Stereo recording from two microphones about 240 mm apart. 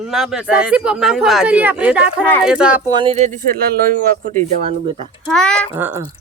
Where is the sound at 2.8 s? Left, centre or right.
Centre; by 4.3 s right.